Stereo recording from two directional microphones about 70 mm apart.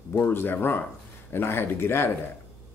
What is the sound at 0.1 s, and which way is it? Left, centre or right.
Speech, left.